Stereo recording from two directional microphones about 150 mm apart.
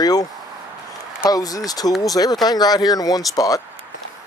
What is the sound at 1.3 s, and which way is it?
Speech, 25° left (ahead or behind).